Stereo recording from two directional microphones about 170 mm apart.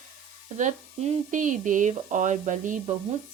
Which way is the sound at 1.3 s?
50° right (ahead or behind).